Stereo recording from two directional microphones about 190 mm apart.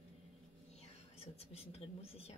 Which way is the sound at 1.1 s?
30° left (ahead or behind).